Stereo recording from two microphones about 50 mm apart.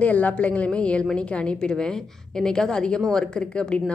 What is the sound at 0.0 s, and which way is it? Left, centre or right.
A woman's voice, left.